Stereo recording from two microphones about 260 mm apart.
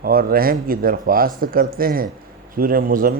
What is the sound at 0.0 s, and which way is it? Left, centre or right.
Speech, right.